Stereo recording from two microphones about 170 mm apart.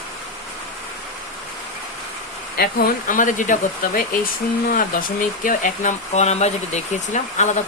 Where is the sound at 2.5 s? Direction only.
55° left (ahead or behind).